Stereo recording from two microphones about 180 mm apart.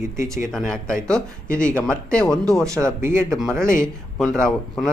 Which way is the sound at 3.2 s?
5° left (ahead or behind).